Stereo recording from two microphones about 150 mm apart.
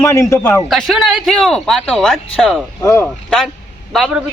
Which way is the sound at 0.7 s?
Centre (ahead or behind).